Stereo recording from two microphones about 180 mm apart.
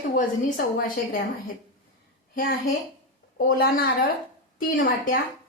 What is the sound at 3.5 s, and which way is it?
A woman's voice, 55° left (ahead or behind).